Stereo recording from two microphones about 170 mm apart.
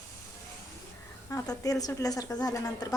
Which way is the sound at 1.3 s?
20° left (ahead or behind).